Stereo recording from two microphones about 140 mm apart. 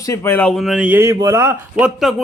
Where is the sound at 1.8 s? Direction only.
Centre (ahead or behind).